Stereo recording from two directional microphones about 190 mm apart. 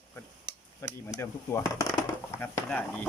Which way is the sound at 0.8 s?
15° left (ahead or behind).